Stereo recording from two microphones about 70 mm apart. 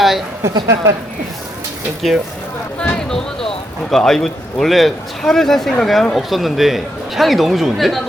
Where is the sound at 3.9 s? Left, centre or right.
Centre.